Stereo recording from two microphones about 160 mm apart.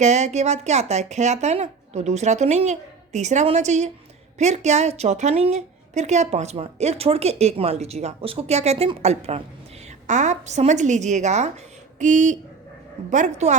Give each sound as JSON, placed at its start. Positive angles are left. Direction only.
{"t": 0.0, "sound": "a woman's voice", "side_deg": -45}